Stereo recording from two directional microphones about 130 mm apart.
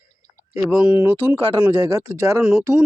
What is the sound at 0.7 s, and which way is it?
Speech, 10° right (ahead or behind).